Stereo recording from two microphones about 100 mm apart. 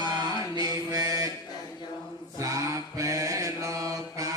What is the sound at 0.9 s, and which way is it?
Mantra, 35° right (ahead or behind).